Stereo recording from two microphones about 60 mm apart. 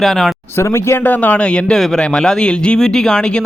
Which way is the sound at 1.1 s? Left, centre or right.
Left.